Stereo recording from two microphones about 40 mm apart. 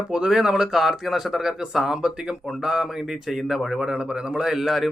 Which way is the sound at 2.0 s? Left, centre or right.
Right.